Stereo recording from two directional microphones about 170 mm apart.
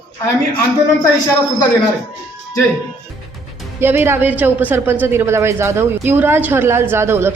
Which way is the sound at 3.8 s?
15° right (ahead or behind).